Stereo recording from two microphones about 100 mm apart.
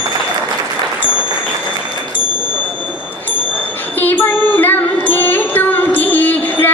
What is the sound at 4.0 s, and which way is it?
Music, 20° left (ahead or behind).